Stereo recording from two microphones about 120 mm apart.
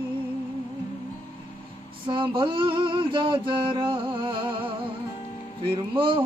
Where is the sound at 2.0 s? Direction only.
45° right (ahead or behind).